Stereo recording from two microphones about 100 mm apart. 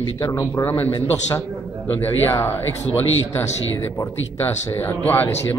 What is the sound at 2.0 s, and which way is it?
Speech, 25° left (ahead or behind).